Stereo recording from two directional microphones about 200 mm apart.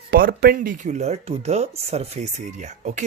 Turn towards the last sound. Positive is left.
turn(degrees=-35)  # may be behind; listen again after turning